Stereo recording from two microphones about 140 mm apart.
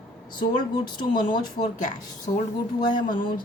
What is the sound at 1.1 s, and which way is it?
Speech, 90° left.